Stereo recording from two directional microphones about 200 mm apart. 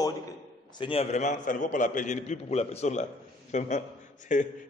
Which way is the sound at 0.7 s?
25° left (ahead or behind).